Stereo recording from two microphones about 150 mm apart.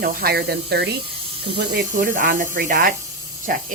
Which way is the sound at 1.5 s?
80° right.